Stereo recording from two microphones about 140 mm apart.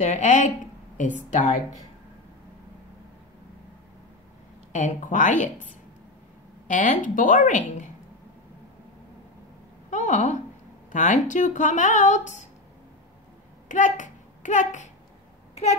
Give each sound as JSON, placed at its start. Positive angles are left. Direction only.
{"t": 0.0, "sound": "speech", "side_deg": 60}
{"t": 4.7, "sound": "speech", "side_deg": 65}
{"t": 6.7, "sound": "speech", "side_deg": 75}
{"t": 9.8, "sound": "a sound", "side_deg": 60}
{"t": 10.9, "sound": "speech", "side_deg": 65}
{"t": 13.7, "sound": "a child's voice", "side_deg": 65}